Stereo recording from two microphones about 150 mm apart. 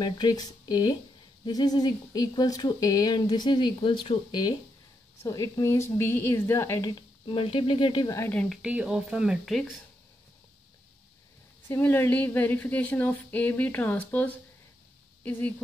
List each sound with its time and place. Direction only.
0.0 s a woman's voice: 25° left (ahead or behind)
7.0 s speech: 35° left (ahead or behind)
8.3 s a woman's voice: 5° left (ahead or behind)
8.6 s speech: 5° right (ahead or behind)
11.6 s a woman's voice: 15° left (ahead or behind)